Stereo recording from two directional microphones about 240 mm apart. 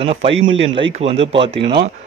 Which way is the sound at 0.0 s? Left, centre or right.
Right.